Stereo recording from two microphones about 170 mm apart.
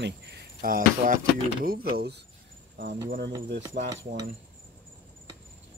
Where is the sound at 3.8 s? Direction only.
65° right (ahead or behind).